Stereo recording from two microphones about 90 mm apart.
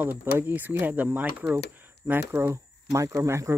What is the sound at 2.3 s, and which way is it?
Speech, 35° right (ahead or behind).